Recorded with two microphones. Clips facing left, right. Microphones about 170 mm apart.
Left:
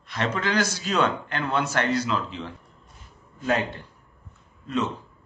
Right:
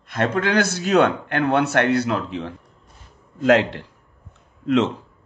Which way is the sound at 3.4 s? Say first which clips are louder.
Right 9 dB; 90° right.